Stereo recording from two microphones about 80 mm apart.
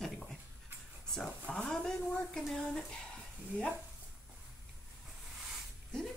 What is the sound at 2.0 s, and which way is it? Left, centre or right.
Speech, left.